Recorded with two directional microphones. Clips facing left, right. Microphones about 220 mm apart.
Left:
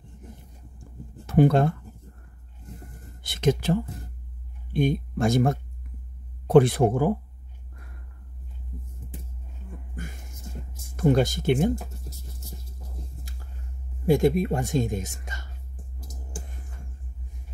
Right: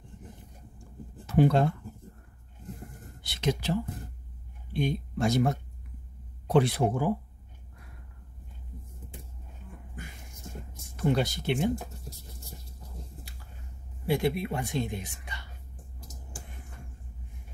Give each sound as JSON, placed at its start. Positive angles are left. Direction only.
{"t": 1.2, "sound": "speech", "side_deg": 50}
{"t": 3.2, "sound": "speech", "side_deg": 50}
{"t": 4.7, "sound": "speech", "side_deg": 50}
{"t": 11.0, "sound": "speech", "side_deg": 45}
{"t": 14.0, "sound": "speech", "side_deg": 45}